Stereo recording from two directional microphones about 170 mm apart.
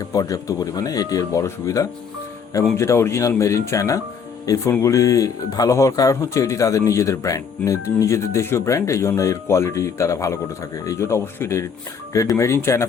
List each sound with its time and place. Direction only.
0.0 s speech: 20° left (ahead or behind)